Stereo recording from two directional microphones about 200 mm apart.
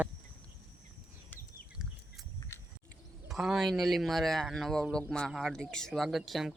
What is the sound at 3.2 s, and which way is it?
Speech, centre (ahead or behind).